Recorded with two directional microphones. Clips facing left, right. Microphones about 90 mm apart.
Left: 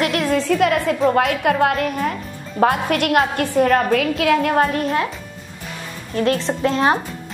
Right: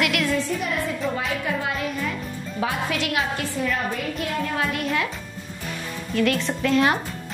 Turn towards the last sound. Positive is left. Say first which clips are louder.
# left 3 dB
turn(degrees=30)  # may be behind; listen again after turning